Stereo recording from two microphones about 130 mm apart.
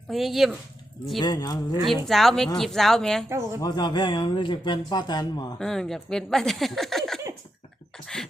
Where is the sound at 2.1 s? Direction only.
Centre (ahead or behind).